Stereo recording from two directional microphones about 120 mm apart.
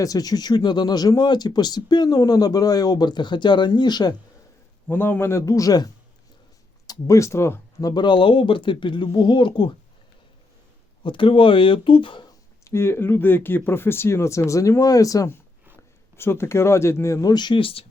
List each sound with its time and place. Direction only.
0.0 s speech: 30° left (ahead or behind)
4.9 s speech: 15° left (ahead or behind); by 9.7 s 40° left (ahead or behind)
11.0 s speech: 45° left (ahead or behind)
12.6 s speech: 20° left (ahead or behind); by 17.8 s 50° left (ahead or behind)